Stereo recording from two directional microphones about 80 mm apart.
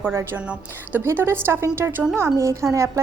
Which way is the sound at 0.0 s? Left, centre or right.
Right.